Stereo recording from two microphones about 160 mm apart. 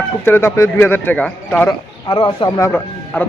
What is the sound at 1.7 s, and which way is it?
A man's voice, 30° left (ahead or behind).